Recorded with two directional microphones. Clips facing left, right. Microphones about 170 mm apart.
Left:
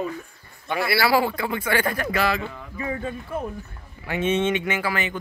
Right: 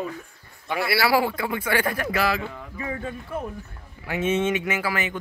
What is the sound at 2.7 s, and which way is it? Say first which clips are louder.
Speech: left 3 dB; 25° left (ahead or behind).